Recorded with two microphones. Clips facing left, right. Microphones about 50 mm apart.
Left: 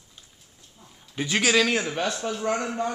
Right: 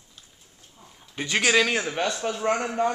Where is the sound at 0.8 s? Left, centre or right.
Centre.